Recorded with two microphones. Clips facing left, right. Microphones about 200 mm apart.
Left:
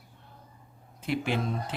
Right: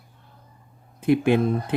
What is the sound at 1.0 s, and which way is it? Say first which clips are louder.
Speech: right 11 dB; 55° right (ahead or behind).